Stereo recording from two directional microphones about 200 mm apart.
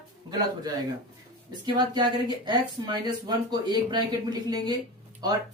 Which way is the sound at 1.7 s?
20° right (ahead or behind).